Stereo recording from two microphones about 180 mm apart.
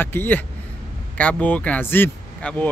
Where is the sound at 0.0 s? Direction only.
10° left (ahead or behind).